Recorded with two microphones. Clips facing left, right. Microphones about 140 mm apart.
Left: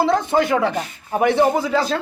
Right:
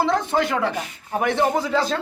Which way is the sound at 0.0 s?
5° left (ahead or behind).